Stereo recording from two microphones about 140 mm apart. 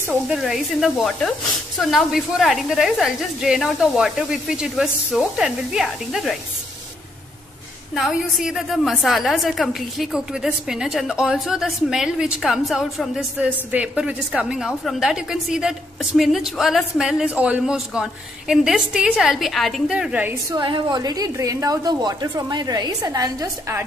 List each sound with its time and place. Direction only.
0.3 s a woman's voice: 5° right (ahead or behind)
7.9 s a woman's voice: 5° right (ahead or behind)
20.5 s a woman's voice: 35° right (ahead or behind)